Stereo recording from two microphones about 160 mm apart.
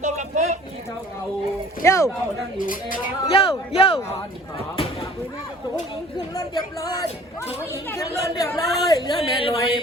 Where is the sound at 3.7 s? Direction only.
35° left (ahead or behind).